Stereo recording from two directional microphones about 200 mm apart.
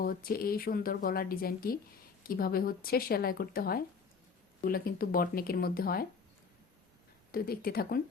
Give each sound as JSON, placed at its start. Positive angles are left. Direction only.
{"t": 0.0, "sound": "a woman's voice", "side_deg": 45}
{"t": 7.3, "sound": "a woman's voice", "side_deg": 50}